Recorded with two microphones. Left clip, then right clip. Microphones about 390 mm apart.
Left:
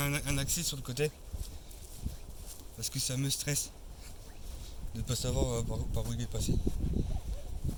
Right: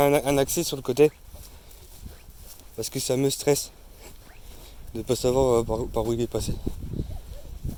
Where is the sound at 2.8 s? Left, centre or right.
Centre.